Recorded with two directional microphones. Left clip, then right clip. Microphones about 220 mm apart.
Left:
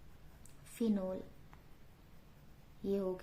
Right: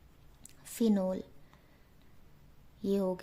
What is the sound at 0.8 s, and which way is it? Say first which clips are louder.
Speech: right 6 dB; 45° right (ahead or behind).